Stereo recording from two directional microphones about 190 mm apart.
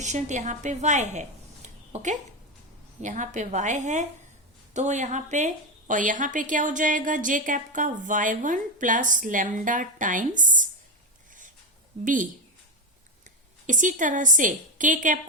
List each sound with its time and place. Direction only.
0.0 s a woman's voice: 40° right (ahead or behind)
12.0 s a woman's voice: 45° right (ahead or behind)
13.7 s a woman's voice: 45° right (ahead or behind)